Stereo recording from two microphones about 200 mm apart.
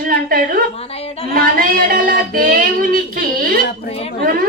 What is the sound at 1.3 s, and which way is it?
A woman's voice, 45° right (ahead or behind).